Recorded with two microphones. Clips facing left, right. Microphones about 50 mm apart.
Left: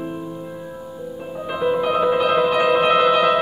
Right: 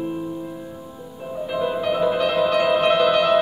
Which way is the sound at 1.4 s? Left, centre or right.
Centre.